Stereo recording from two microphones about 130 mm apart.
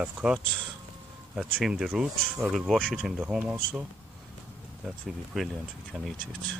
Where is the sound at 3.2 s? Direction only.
15° right (ahead or behind).